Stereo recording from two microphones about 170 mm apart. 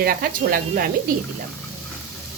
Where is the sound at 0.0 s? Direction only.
60° right (ahead or behind).